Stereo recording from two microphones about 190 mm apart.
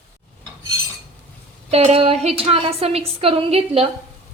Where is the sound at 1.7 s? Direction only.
35° right (ahead or behind).